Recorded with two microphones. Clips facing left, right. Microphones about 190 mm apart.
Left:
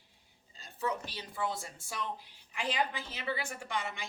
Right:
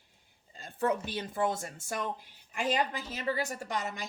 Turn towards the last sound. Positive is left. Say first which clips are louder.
# right 2 dB
turn(degrees=-40)  # may be behind; listen again after turning